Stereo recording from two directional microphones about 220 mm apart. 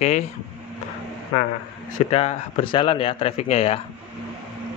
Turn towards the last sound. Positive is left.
turn(degrees=25)  # may be behind; listen again after turning